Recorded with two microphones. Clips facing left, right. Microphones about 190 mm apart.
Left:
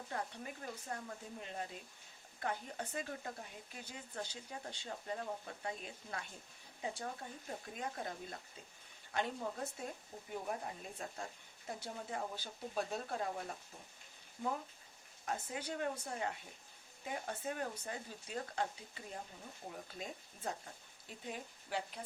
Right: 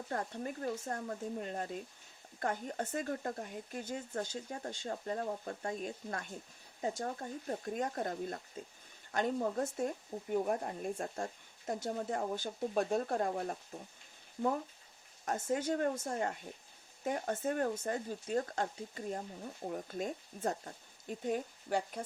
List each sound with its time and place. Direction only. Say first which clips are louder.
0.1 s speech: right 6 dB; 45° right (ahead or behind)
15.2 s speech: right 8 dB; 45° right (ahead or behind)